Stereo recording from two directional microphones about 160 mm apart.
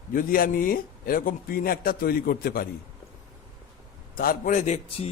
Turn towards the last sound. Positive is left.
turn(degrees=40)  # may be behind; listen again after turning